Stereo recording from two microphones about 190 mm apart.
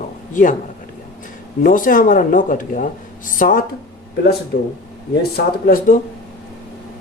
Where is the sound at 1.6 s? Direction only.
45° left (ahead or behind).